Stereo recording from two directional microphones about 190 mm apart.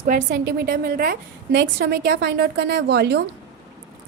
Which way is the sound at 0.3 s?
60° right (ahead or behind).